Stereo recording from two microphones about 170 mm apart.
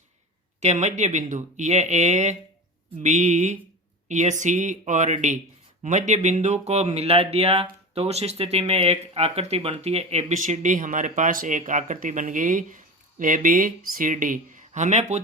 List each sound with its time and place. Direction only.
0.6 s speech: 40° right (ahead or behind)